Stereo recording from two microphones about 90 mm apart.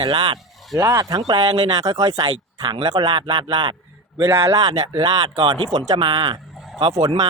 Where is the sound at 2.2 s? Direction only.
75° right (ahead or behind).